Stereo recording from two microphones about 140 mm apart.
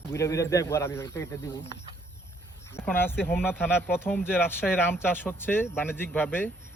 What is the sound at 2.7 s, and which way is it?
Speech, 15° left (ahead or behind).